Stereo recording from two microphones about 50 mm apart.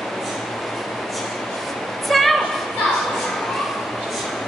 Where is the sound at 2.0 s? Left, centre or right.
Centre.